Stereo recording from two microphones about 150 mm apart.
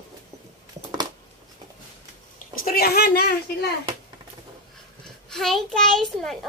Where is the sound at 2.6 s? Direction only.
90° left.